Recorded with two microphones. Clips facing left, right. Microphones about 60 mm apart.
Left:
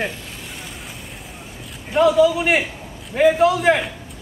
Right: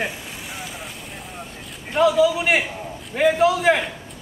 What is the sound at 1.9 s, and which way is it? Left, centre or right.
A man's voice, centre.